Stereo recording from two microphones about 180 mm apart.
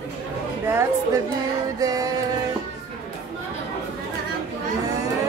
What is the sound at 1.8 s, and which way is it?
Music, 20° right (ahead or behind).